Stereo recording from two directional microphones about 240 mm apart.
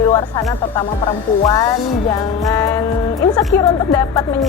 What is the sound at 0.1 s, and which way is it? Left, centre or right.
Speech, centre.